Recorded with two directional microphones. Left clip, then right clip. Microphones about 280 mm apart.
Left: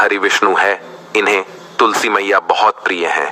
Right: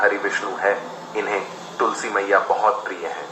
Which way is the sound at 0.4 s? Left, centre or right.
Left.